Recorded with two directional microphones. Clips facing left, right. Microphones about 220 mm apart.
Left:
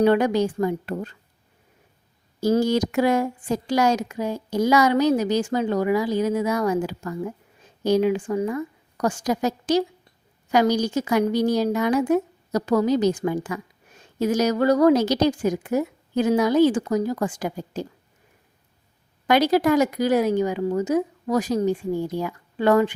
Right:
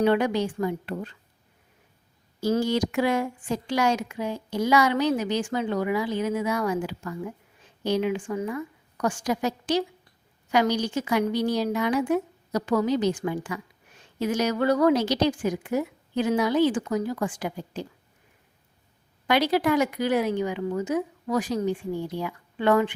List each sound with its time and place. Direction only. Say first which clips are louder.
0.0 s speech: left 4 dB; 40° left (ahead or behind)
2.4 s speech: left 4 dB; 40° left (ahead or behind)
19.3 s speech: left 4 dB; 45° left (ahead or behind)